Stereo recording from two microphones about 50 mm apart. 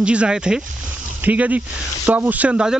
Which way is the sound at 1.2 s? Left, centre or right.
Right.